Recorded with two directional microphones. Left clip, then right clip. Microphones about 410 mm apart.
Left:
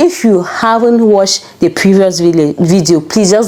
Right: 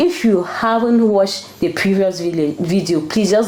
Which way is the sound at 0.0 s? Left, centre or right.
Left.